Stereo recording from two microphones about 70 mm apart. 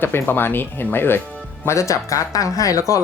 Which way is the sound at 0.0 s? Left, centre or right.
Left.